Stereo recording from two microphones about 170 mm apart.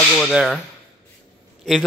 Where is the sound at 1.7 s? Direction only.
5° left (ahead or behind).